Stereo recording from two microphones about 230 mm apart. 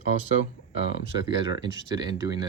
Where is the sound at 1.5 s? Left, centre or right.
Centre.